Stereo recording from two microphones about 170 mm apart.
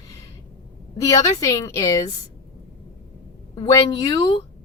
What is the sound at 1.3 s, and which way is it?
Speech, 20° left (ahead or behind).